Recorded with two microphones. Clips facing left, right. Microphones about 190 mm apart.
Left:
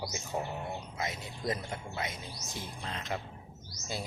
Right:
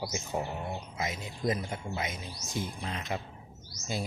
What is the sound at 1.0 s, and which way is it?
Speech, 20° right (ahead or behind).